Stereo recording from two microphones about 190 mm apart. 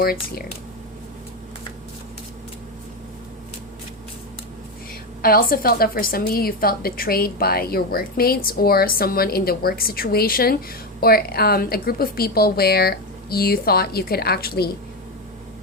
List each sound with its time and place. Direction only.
0.0 s a woman's voice: 55° left (ahead or behind)
5.2 s a woman's voice: 50° left (ahead or behind)